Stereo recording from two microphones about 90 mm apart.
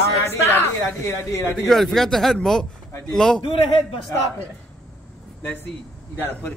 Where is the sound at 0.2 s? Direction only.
25° left (ahead or behind).